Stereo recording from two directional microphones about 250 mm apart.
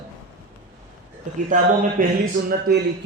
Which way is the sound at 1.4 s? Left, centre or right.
Right.